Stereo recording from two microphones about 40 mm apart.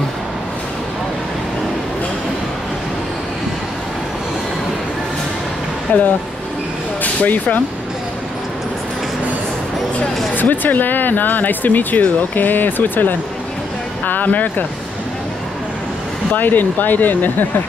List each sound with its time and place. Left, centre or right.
5.9 s speech: left
10.3 s speech: left
16.3 s speech: left